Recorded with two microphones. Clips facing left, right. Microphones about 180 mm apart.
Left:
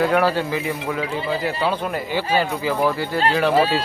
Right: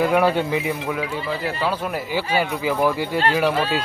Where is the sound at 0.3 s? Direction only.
20° right (ahead or behind).